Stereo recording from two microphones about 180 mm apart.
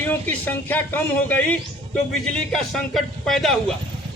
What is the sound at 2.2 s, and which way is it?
Speech, 5° left (ahead or behind).